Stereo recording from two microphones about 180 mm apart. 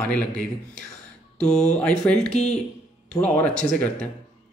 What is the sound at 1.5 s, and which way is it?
Speech, 40° left (ahead or behind).